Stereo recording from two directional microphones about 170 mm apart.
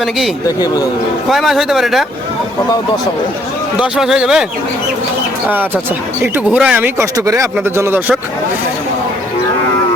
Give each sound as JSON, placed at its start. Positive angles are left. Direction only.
{"t": 0.6, "sound": "speech", "side_deg": 20}
{"t": 1.3, "sound": "speech", "side_deg": 0}
{"t": 3.8, "sound": "speech", "side_deg": -5}
{"t": 5.5, "sound": "speech", "side_deg": -10}